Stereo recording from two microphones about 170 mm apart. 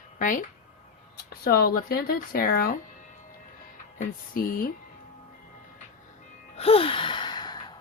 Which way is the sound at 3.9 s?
55° left (ahead or behind).